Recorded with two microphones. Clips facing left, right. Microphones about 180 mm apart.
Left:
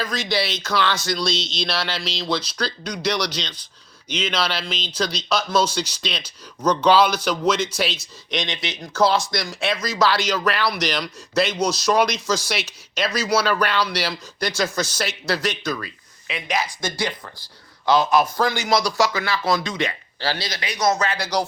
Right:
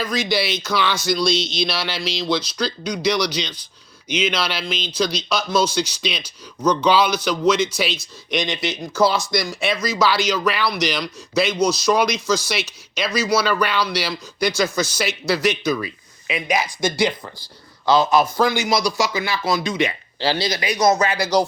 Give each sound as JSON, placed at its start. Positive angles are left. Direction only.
{"t": 0.0, "sound": "speech", "side_deg": -5}
{"t": 20.1, "sound": "speech", "side_deg": -25}
{"t": 20.6, "sound": "speech", "side_deg": -10}